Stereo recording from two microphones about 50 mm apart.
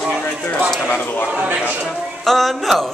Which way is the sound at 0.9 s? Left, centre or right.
Left.